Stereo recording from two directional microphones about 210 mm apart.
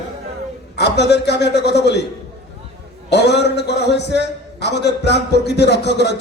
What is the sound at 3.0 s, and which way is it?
A man's voice, 55° left (ahead or behind).